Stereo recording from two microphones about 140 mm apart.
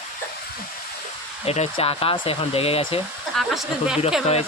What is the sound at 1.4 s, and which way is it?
Speech, 45° left (ahead or behind).